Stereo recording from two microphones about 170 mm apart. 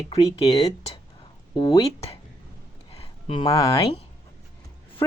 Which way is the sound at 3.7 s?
35° left (ahead or behind).